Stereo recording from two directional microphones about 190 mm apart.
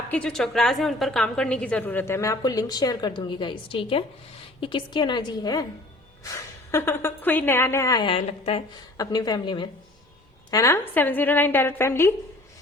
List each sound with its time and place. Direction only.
0.1 s a woman's voice: 5° left (ahead or behind); by 8.6 s 30° left (ahead or behind)
9.0 s a woman's voice: 20° left (ahead or behind)